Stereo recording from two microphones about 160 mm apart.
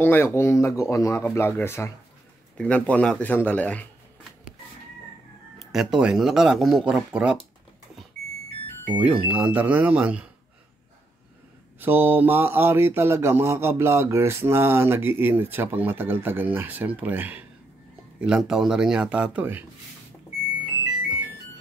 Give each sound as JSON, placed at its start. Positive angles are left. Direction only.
{"t": 0.0, "sound": "speech", "side_deg": 15}
{"t": 5.6, "sound": "speech", "side_deg": 0}
{"t": 8.9, "sound": "mantra", "side_deg": -10}
{"t": 11.8, "sound": "mantra", "side_deg": -15}
{"t": 18.2, "sound": "speech", "side_deg": -5}